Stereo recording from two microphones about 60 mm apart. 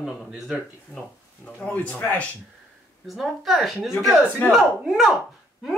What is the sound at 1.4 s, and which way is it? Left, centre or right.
Speech, left.